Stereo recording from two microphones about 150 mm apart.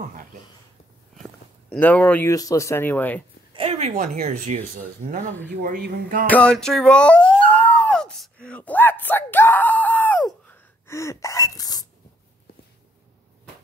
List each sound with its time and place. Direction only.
1.2 s a sound: 5° left (ahead or behind)
2.2 s speech: 20° left (ahead or behind)
3.5 s a sound: 40° right (ahead or behind)
3.9 s speech: 65° right (ahead or behind)
5.6 s speech: 70° right (ahead or behind)
6.2 s speech: 10° left (ahead or behind); by 11.8 s 25° left (ahead or behind)